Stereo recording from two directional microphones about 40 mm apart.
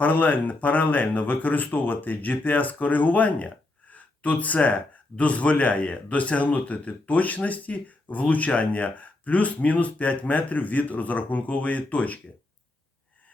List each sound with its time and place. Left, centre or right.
0.0 s speech: left